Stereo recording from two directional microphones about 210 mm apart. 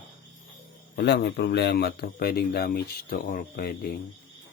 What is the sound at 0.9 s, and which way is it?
Speech, 55° left (ahead or behind).